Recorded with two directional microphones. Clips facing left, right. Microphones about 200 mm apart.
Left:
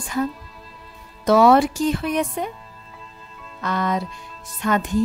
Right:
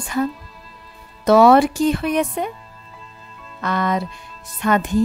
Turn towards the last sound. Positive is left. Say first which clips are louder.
# right 3 dB
turn(degrees=-65)  # may be behind; listen again after turning